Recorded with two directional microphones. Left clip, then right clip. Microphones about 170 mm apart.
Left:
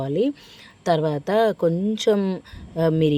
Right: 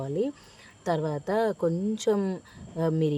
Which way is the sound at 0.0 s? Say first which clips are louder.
Left 7 dB; 25° left (ahead or behind).